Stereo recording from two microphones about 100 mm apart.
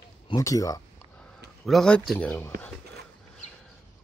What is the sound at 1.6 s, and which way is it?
Speech, 5° left (ahead or behind).